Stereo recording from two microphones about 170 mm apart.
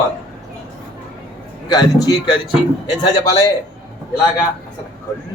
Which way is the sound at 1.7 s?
25° left (ahead or behind).